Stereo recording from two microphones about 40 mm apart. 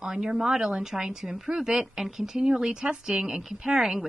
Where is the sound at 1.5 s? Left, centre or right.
Centre.